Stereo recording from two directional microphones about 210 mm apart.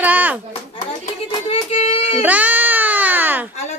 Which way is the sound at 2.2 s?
5° right (ahead or behind).